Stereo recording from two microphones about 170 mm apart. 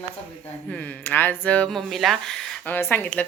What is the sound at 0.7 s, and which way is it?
A woman's voice, 10° left (ahead or behind).